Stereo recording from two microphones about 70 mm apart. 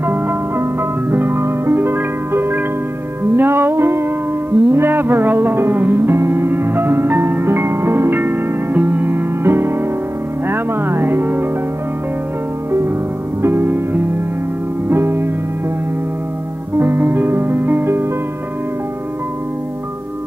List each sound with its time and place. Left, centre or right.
0.0 s music: right
13.4 s music: right
16.7 s music: right